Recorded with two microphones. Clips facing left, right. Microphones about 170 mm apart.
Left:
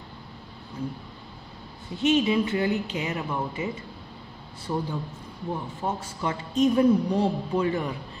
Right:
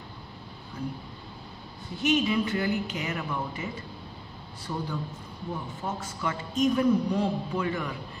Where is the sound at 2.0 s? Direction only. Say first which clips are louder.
Left 3 dB; 25° left (ahead or behind).